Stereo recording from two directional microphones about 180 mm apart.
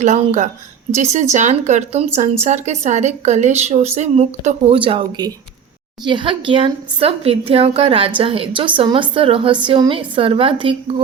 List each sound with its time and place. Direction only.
0.0 s a woman's voice: 40° right (ahead or behind)